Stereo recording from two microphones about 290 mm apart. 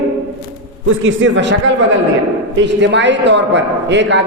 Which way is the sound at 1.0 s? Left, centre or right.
Right.